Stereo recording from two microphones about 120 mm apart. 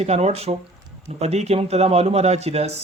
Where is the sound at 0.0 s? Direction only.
65° right (ahead or behind).